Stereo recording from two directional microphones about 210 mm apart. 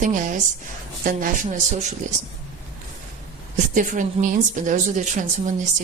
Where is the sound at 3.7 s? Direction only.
40° right (ahead or behind).